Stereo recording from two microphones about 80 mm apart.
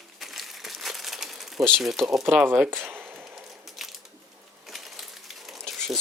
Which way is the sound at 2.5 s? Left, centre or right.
Right.